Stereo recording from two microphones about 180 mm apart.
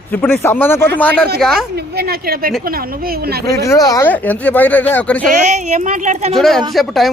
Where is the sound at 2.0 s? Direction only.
60° right (ahead or behind).